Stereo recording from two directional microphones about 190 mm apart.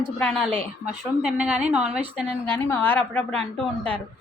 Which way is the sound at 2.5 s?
10° left (ahead or behind).